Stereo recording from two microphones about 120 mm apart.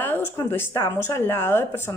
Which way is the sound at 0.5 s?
20° left (ahead or behind).